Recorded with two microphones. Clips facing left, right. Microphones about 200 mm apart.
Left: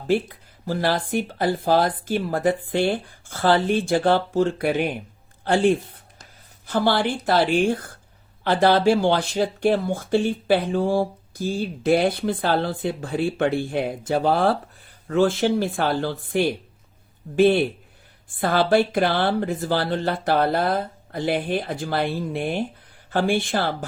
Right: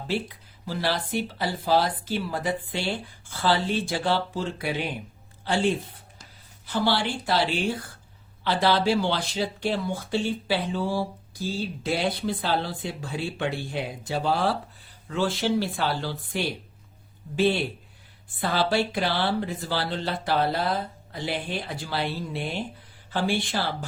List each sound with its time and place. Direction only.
0.1 s speech: 50° left (ahead or behind)